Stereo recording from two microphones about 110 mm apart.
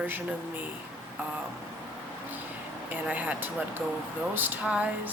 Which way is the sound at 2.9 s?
15° right (ahead or behind).